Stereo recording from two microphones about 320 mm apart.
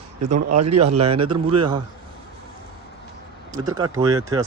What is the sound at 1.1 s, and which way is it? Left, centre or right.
Speech, centre.